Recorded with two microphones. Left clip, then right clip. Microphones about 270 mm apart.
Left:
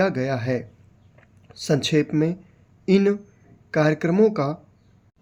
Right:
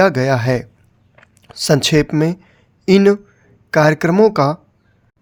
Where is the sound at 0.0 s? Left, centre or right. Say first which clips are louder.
Right 9 dB; right.